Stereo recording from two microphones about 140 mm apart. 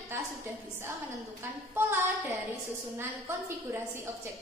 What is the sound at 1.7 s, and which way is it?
Speech, 15° right (ahead or behind).